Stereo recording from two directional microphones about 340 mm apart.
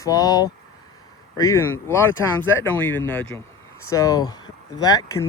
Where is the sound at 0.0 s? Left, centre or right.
Centre.